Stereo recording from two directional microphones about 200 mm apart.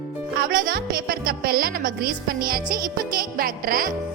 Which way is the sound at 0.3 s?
45° right (ahead or behind).